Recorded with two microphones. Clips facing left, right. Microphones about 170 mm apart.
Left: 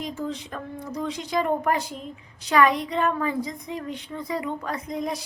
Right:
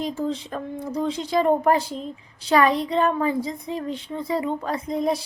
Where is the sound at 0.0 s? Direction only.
30° right (ahead or behind).